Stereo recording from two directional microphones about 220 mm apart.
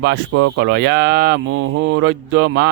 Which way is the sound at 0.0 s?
60° right (ahead or behind).